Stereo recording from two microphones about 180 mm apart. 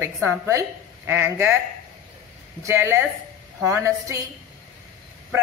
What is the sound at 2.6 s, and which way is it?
A woman's voice, 15° right (ahead or behind).